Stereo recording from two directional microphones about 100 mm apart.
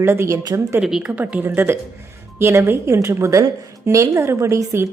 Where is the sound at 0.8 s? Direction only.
5° right (ahead or behind).